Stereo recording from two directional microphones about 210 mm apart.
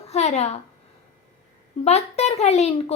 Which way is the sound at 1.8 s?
30° left (ahead or behind).